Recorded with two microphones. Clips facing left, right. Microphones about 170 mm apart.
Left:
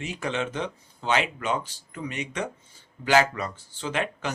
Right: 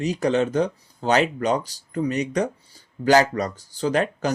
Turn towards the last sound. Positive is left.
turn(degrees=-40)  # may be behind; listen again after turning